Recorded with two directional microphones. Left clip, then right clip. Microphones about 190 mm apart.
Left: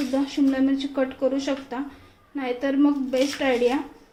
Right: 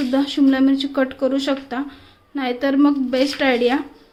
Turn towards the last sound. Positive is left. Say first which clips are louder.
# right 4 dB
turn(degrees=-35)  # may be behind; listen again after turning